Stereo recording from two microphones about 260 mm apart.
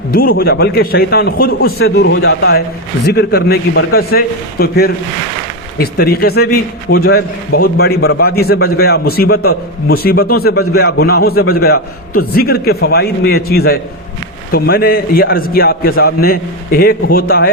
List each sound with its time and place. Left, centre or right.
0.1 s a man's voice: left